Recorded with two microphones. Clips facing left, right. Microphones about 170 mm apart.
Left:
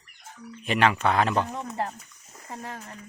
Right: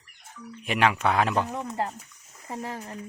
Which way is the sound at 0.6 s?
10° right (ahead or behind).